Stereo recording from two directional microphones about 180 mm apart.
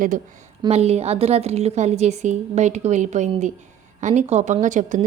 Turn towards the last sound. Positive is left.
turn(degrees=-45)  # may be behind; listen again after turning